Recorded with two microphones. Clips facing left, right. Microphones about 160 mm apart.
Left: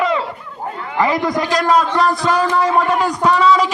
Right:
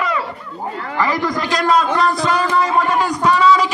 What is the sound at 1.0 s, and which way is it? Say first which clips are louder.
Speech: left 3 dB; 20° left (ahead or behind).